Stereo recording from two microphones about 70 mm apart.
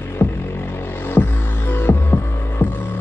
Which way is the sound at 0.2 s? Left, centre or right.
Left.